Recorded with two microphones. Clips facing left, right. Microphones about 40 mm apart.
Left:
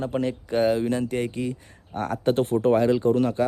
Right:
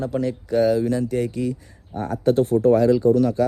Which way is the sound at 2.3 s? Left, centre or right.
Left.